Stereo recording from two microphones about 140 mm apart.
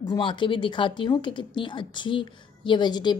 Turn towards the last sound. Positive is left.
turn(degrees=30)  # may be behind; listen again after turning